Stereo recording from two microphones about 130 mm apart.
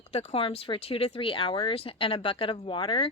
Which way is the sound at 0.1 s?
55° left (ahead or behind).